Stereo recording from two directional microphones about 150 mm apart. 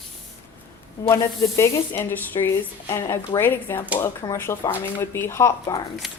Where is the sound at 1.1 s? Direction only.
20° left (ahead or behind).